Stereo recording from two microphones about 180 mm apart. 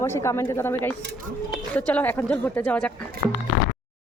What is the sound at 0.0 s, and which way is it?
Speech, 15° left (ahead or behind).